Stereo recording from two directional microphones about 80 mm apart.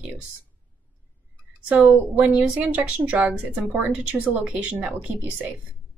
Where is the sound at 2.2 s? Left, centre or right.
Centre.